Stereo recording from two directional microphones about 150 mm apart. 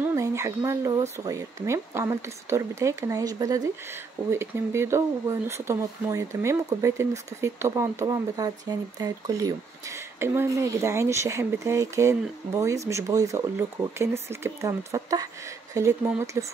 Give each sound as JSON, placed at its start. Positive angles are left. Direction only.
{"t": 0.0, "sound": "speech", "side_deg": -20}